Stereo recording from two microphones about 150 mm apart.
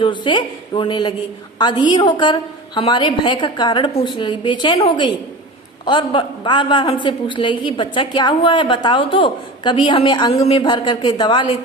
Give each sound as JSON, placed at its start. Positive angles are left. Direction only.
{"t": 0.0, "sound": "a man's voice", "side_deg": 30}